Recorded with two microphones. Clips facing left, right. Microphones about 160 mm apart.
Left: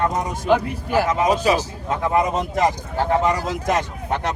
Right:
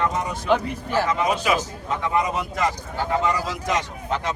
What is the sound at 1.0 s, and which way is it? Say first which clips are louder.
Speech: left 4 dB; 40° left (ahead or behind).